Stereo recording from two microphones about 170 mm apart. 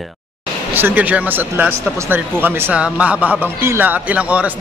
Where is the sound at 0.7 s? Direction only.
10° right (ahead or behind).